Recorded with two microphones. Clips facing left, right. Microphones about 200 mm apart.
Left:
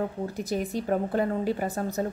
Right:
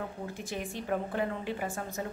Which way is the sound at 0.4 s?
40° left (ahead or behind).